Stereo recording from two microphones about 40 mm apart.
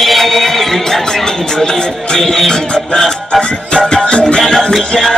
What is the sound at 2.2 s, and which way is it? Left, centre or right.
Music, centre.